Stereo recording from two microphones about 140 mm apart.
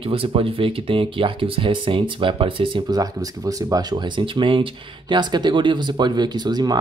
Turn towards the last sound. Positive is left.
turn(degrees=-30)  # may be behind; listen again after turning